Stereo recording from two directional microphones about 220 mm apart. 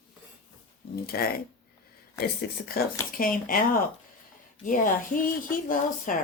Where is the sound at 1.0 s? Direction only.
40° left (ahead or behind).